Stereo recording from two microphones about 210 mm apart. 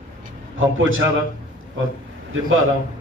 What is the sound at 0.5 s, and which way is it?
Speech, 70° right (ahead or behind).